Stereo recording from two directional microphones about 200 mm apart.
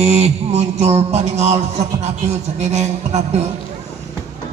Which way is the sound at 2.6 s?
35° right (ahead or behind).